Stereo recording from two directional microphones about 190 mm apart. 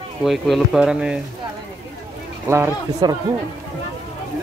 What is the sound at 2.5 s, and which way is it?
Speech, 15° right (ahead or behind).